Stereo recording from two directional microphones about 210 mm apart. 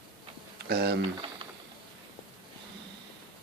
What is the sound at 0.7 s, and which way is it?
Speech, 50° right (ahead or behind).